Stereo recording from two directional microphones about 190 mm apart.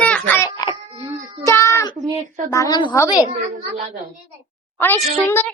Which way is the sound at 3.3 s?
35° right (ahead or behind).